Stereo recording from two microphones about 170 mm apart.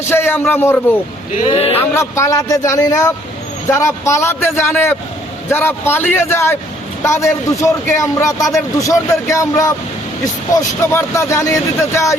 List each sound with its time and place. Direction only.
0.1 s speech: 15° left (ahead or behind)
1.5 s speech: 35° left (ahead or behind)
1.9 s a man's voice: 15° left (ahead or behind)